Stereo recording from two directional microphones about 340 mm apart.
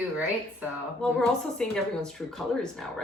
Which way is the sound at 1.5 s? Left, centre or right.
Centre.